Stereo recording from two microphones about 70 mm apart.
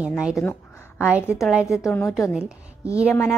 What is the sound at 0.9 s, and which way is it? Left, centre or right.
Speech, centre.